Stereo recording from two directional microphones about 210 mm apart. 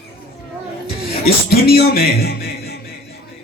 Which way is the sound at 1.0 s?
50° left (ahead or behind).